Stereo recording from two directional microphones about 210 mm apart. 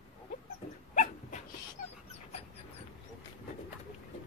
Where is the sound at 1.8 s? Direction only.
35° left (ahead or behind).